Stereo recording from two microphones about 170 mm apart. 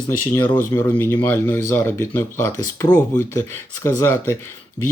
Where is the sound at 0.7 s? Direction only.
10° left (ahead or behind).